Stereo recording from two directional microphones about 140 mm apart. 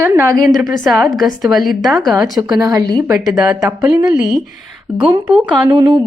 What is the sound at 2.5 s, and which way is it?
Speech, 25° right (ahead or behind).